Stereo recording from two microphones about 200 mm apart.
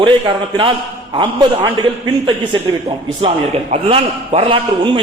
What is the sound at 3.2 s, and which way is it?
A man's voice, 30° right (ahead or behind).